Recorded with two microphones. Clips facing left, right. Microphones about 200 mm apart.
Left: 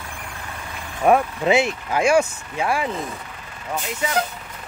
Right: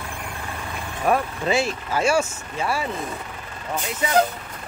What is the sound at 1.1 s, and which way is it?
Speech, 20° left (ahead or behind).